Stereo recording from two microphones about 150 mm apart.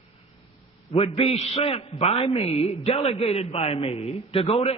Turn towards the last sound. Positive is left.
turn(degrees=40)  # may be behind; listen again after turning